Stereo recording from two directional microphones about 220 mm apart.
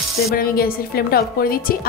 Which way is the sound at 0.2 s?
45° left (ahead or behind).